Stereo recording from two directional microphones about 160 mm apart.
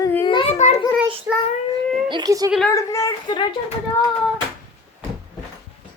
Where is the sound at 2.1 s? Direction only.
25° right (ahead or behind).